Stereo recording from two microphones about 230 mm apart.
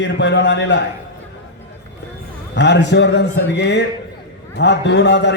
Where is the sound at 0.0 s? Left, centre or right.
Left.